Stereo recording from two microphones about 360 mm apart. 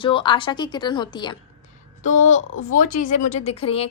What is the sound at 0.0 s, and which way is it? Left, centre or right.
A woman's voice, centre.